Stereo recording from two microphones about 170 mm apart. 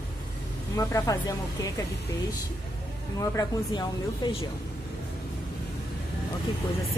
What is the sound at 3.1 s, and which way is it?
Speech, 20° left (ahead or behind).